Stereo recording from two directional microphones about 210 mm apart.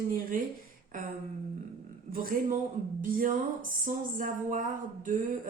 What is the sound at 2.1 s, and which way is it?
Speech, 45° right (ahead or behind).